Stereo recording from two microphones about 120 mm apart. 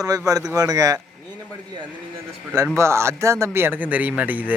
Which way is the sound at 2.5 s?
25° right (ahead or behind).